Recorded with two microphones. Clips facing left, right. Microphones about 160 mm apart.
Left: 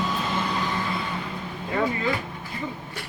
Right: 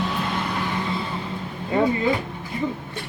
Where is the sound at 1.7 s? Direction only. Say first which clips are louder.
Right 5 dB; 20° right (ahead or behind).